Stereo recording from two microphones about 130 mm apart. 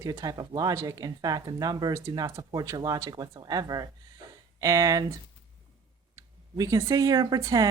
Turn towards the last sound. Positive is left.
turn(degrees=-25)  # may be behind; listen again after turning